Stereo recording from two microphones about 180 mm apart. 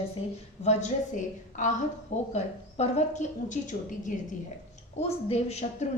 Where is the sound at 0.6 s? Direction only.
40° left (ahead or behind).